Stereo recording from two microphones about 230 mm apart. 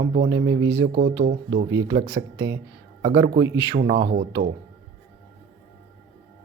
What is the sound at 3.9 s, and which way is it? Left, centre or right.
Speech, right.